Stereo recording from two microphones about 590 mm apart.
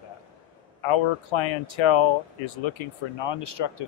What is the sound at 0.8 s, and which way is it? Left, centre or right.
Speech, left.